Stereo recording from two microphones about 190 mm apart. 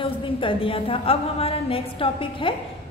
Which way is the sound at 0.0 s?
25° left (ahead or behind).